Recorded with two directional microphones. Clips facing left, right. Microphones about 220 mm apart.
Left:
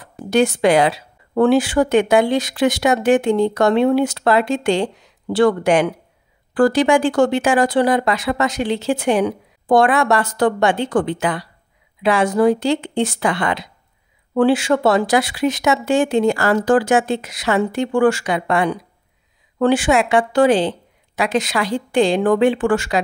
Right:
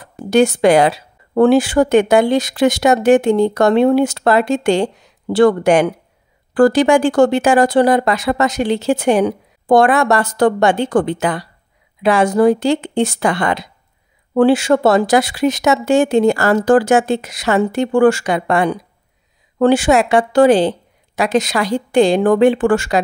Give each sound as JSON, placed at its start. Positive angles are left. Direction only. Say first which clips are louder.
{"t": 0.3, "sound": "a woman's voice", "louder": "right 3 dB", "side_deg": -45}